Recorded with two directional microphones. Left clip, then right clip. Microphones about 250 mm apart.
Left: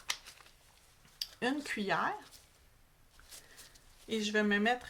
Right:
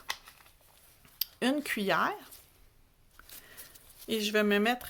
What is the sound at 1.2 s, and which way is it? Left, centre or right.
Speech, right.